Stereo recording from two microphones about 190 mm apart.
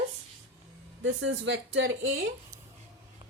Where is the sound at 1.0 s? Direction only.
85° right.